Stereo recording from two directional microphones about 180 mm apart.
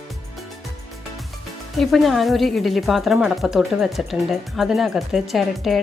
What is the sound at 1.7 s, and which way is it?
A woman's voice, centre (ahead or behind).